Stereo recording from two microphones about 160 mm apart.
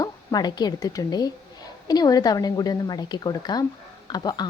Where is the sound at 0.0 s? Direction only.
25° left (ahead or behind).